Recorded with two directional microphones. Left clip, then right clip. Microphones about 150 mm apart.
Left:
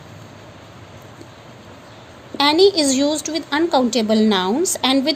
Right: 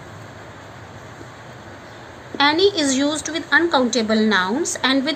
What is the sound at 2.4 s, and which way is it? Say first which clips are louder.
A woman's voice: left 2 dB; 60° left (ahead or behind).